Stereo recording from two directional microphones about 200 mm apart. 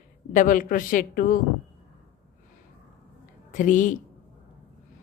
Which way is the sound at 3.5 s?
40° left (ahead or behind).